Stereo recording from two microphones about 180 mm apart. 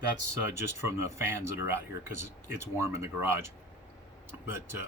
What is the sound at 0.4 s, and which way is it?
Speech, 15° right (ahead or behind).